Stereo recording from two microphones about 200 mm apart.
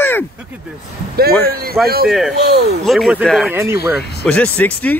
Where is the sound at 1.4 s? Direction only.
50° right (ahead or behind).